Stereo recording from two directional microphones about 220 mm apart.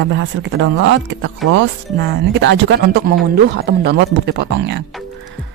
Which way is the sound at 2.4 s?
55° right (ahead or behind).